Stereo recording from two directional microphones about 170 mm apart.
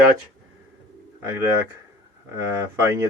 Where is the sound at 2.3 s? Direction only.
20° right (ahead or behind).